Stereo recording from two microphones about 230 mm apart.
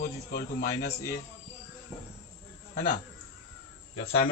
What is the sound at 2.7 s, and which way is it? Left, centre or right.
Speech, left.